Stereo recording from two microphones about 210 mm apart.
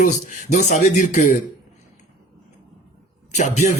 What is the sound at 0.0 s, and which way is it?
A man's voice, 40° left (ahead or behind).